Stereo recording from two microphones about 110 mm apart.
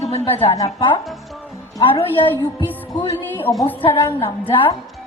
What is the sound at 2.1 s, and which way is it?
Speech, 15° left (ahead or behind).